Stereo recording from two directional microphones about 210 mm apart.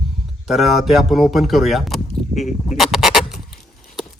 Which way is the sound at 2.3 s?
35° left (ahead or behind).